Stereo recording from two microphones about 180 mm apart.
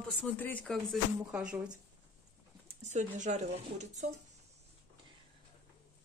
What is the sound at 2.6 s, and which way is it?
Speech, 40° right (ahead or behind).